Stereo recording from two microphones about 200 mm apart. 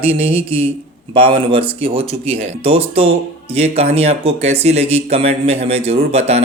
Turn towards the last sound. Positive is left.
turn(degrees=-30)  # may be behind; listen again after turning